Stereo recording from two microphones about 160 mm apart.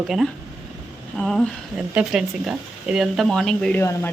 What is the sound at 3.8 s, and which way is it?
Speech, 15° left (ahead or behind).